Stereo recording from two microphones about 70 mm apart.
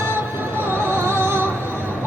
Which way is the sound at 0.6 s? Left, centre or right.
Right.